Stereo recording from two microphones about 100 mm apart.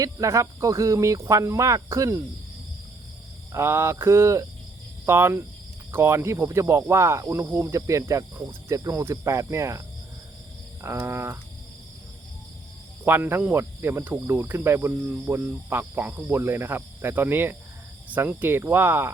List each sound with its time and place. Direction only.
0.0 s speech: 35° right (ahead or behind)
3.5 s speech: 25° right (ahead or behind)
10.8 s cricket: 25° right (ahead or behind)
13.1 s speech: 20° right (ahead or behind)